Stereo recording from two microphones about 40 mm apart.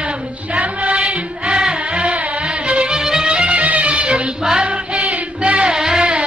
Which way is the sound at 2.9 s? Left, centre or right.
Centre.